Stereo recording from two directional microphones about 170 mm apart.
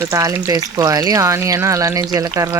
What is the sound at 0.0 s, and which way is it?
Speech, 20° right (ahead or behind).